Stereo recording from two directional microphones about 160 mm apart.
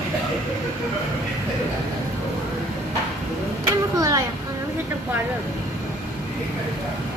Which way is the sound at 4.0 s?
20° right (ahead or behind).